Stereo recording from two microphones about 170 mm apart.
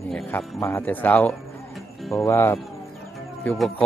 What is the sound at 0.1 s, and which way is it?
A man's voice, 10° left (ahead or behind).